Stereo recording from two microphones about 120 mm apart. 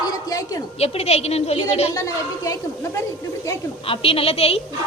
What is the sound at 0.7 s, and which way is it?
A woman's voice, 60° left (ahead or behind).